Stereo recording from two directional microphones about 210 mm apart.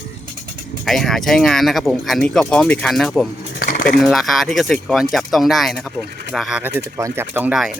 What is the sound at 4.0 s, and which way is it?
Speech, centre (ahead or behind).